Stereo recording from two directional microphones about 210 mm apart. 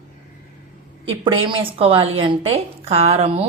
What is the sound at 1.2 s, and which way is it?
A woman's voice, 25° right (ahead or behind).